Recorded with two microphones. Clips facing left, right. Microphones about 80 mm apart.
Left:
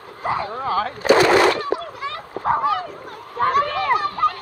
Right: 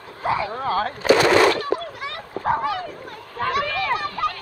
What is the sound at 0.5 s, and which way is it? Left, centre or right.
Dog, centre.